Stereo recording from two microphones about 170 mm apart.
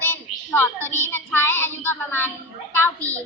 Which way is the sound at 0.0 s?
10° left (ahead or behind).